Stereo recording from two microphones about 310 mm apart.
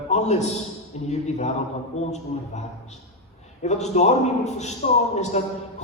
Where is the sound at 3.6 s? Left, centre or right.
Left.